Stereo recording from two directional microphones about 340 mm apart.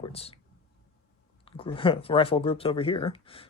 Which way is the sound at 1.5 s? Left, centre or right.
Centre.